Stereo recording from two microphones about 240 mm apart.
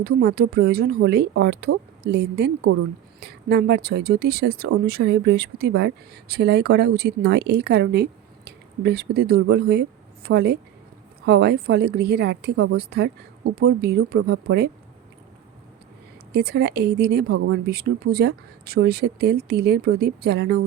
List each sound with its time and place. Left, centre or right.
0.0 s speech: right
16.3 s speech: right